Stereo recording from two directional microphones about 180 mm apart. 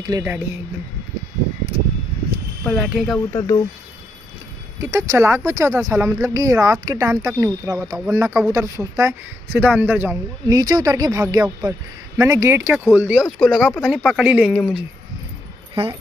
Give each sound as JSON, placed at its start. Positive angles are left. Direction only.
{"t": 0.0, "sound": "speech", "side_deg": -15}
{"t": 2.6, "sound": "speech", "side_deg": -5}
{"t": 3.3, "sound": "speech", "side_deg": 20}
{"t": 4.7, "sound": "speech", "side_deg": -15}
{"t": 15.7, "sound": "speech", "side_deg": -30}